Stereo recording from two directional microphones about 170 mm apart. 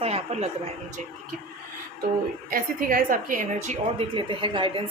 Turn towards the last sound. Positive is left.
turn(degrees=-30)  # may be behind; listen again after turning